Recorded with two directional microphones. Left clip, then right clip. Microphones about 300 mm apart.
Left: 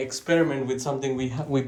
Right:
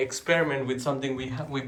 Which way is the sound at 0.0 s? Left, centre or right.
Centre.